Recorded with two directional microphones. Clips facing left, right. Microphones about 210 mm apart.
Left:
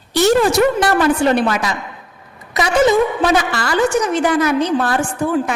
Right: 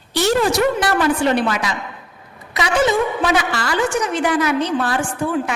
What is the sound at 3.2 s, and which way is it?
A woman's voice, 45° left (ahead or behind).